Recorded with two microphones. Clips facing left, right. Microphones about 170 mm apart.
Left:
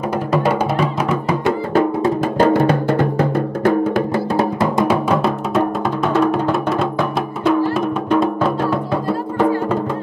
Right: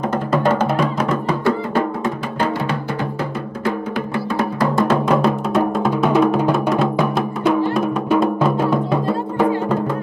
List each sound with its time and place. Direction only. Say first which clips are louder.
0.3 s music: even; 10° left (ahead or behind)
2.3 s music: left 9 dB; 45° left (ahead or behind)
3.6 s music: left 6 dB; 40° left (ahead or behind)
4.8 s music: even; 5° left (ahead or behind)